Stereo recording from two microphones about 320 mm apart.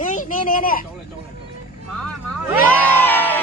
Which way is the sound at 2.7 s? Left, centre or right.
Centre.